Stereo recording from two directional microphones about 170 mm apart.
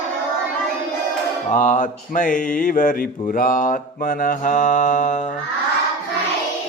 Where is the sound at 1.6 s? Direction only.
50° left (ahead or behind).